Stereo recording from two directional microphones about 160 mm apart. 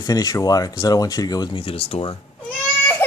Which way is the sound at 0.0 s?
25° left (ahead or behind).